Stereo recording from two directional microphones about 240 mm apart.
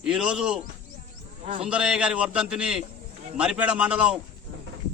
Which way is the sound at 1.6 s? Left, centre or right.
Centre.